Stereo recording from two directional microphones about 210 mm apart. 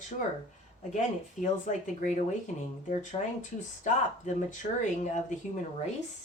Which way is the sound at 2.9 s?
35° left (ahead or behind).